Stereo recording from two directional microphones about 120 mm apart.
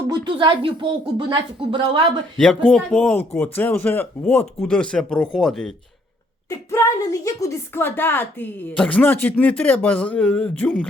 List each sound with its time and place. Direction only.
0.1 s speech: 40° right (ahead or behind)
2.6 s a woman's voice: 5° left (ahead or behind)
6.5 s a woman's voice: 25° left (ahead or behind); by 10.7 s 10° left (ahead or behind)